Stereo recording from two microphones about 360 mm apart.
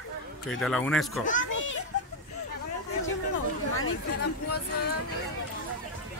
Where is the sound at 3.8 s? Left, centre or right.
Left.